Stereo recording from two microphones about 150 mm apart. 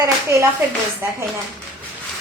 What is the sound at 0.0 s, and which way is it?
Speech, 20° right (ahead or behind).